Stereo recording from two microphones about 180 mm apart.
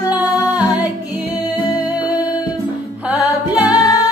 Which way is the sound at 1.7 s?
20° left (ahead or behind).